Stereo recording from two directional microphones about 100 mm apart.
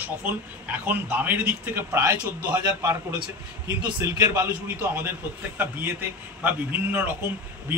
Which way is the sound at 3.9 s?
30° right (ahead or behind).